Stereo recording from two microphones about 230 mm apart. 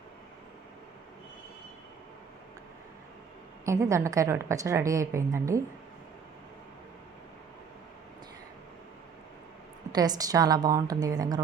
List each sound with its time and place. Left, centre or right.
3.7 s a woman's voice: centre
9.9 s a woman's voice: centre